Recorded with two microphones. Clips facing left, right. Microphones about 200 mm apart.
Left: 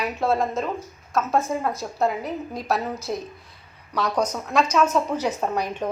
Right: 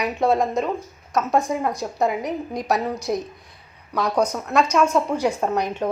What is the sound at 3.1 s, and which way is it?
A woman's voice, 10° right (ahead or behind).